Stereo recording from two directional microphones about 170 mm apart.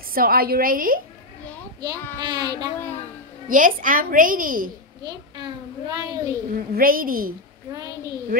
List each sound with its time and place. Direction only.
0.1 s a woman's voice: 60° right (ahead or behind)
1.8 s a child's voice: 25° right (ahead or behind)
3.4 s a woman's voice: 55° right (ahead or behind)
5.0 s a child's voice: 25° right (ahead or behind)
6.7 s a woman's voice: 55° right (ahead or behind)